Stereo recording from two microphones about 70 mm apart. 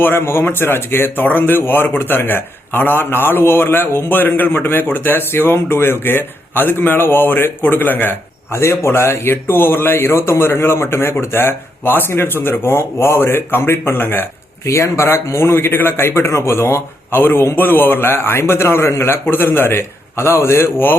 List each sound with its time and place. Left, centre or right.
0.0 s speech: left
8.5 s speech: left